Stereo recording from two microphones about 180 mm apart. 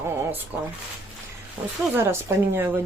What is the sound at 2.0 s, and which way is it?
Speech, 15° right (ahead or behind).